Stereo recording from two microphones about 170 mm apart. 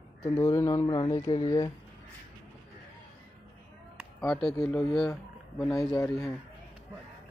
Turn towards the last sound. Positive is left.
turn(degrees=15)  # may be behind; listen again after turning